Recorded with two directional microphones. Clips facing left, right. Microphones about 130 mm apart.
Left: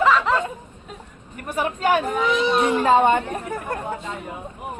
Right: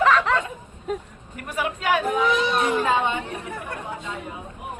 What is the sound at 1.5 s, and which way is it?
A woman's voice, 30° left (ahead or behind).